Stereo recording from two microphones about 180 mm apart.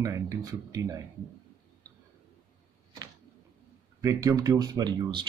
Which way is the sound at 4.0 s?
20° right (ahead or behind).